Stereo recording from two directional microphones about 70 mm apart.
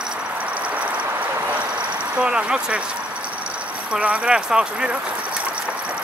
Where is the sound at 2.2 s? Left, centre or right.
Centre.